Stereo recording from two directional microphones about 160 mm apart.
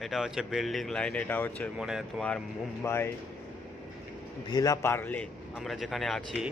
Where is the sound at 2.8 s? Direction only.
15° left (ahead or behind).